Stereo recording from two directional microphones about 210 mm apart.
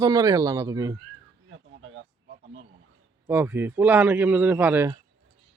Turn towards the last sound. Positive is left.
turn(degrees=-10)  # may be behind; listen again after turning